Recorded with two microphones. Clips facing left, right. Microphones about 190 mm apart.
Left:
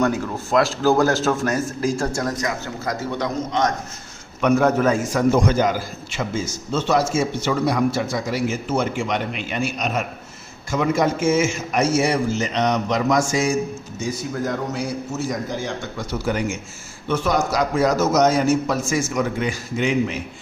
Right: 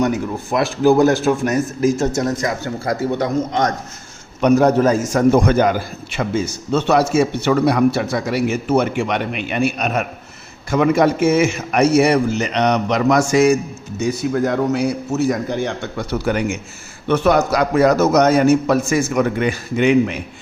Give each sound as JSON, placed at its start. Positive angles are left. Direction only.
{"t": 0.0, "sound": "a man's voice", "side_deg": -15}